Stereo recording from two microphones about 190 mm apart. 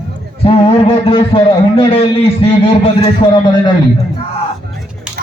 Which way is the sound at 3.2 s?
20° left (ahead or behind).